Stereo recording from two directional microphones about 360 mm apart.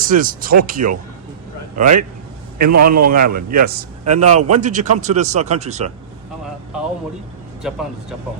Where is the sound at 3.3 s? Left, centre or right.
Right.